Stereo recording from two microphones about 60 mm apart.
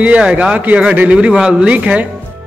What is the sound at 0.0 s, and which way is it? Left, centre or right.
A man's voice, centre.